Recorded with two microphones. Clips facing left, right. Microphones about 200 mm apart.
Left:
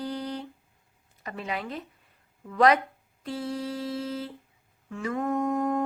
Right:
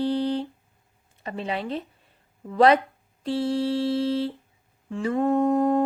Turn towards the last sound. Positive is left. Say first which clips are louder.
# right 6 dB
turn(degrees=-30)  # may be behind; listen again after turning